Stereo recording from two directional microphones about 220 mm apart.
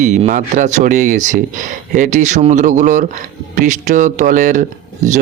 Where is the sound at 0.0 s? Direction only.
35° right (ahead or behind).